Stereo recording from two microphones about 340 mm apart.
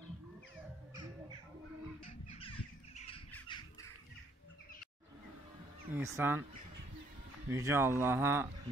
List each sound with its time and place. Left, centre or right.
2.0 s crow: centre
3.3 s bird: centre
5.9 s speech: centre
7.4 s speech: centre